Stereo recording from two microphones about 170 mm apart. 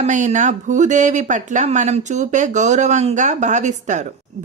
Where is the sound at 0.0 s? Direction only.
45° right (ahead or behind).